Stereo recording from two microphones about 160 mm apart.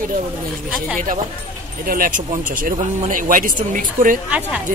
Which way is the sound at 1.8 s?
60° right (ahead or behind).